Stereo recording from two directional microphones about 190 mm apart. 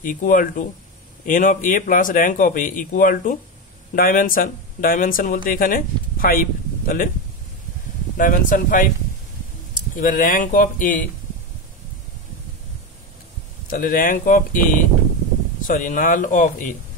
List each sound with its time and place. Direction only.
0.0 s speech: 45° left (ahead or behind)
8.2 s speech: 45° left (ahead or behind)
9.9 s speech: 45° left (ahead or behind)
13.7 s speech: 45° left (ahead or behind)